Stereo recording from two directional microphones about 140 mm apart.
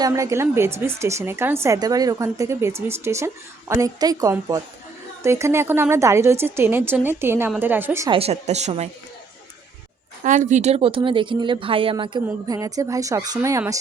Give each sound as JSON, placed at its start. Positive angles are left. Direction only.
{"t": 0.0, "sound": "a woman's voice", "side_deg": -20}
{"t": 8.1, "sound": "speech", "side_deg": -45}
{"t": 10.2, "sound": "speech", "side_deg": -60}
{"t": 12.5, "sound": "a woman's voice", "side_deg": -25}